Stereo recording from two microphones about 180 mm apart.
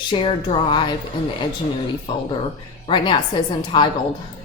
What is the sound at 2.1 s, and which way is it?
Speech, 25° left (ahead or behind).